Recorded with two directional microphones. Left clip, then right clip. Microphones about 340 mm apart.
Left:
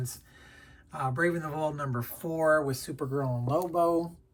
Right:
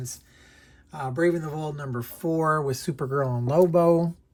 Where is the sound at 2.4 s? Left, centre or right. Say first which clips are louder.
Left 2 dB; right.